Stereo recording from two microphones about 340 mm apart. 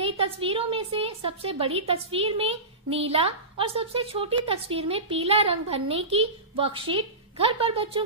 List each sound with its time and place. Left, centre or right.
0.0 s a woman's voice: centre